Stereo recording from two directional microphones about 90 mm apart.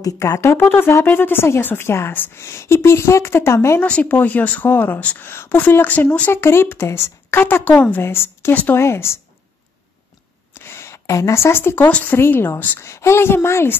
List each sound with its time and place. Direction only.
0.0 s speech: 35° left (ahead or behind)
3.8 s speech: 15° left (ahead or behind)
7.7 s a woman's voice: 10° left (ahead or behind)
8.0 s speech: 25° left (ahead or behind)
10.6 s speech: 30° left (ahead or behind)